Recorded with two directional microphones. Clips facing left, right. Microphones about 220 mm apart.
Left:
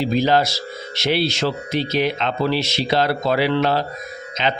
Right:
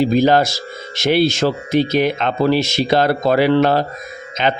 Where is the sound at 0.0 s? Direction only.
50° right (ahead or behind).